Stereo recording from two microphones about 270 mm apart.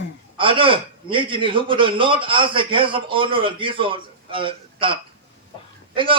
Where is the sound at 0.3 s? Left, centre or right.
Centre.